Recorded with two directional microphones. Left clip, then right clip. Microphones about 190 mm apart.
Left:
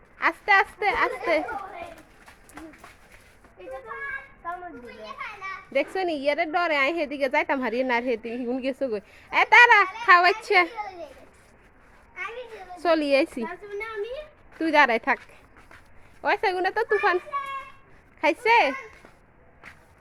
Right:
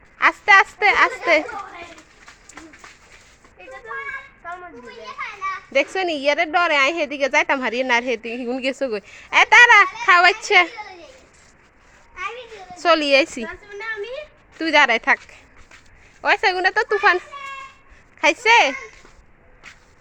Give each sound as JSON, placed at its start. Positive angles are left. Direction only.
{"t": 0.2, "sound": "a woman's voice", "side_deg": -20}
{"t": 5.7, "sound": "a woman's voice", "side_deg": -15}
{"t": 12.7, "sound": "a woman's voice", "side_deg": 5}